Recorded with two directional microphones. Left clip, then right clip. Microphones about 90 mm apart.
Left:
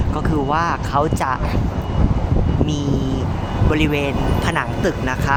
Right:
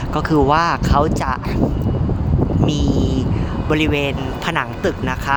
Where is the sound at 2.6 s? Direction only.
60° right (ahead or behind).